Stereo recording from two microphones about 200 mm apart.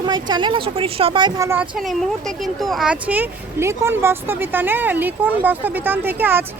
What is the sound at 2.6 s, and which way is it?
Speech, centre (ahead or behind).